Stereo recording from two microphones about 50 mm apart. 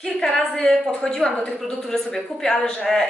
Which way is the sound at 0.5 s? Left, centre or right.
Centre.